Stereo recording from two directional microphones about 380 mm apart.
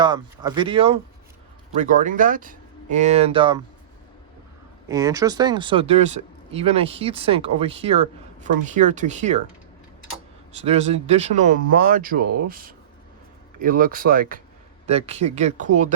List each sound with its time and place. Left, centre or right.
0.0 s speech: centre
4.9 s speech: centre
10.5 s speech: centre